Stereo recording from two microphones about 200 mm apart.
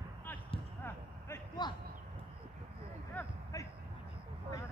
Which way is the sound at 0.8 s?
10° left (ahead or behind).